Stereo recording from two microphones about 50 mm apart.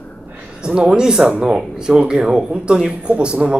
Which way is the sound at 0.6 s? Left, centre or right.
Right.